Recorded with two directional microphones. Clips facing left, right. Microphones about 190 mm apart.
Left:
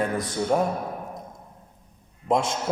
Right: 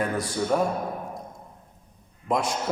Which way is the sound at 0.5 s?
20° left (ahead or behind).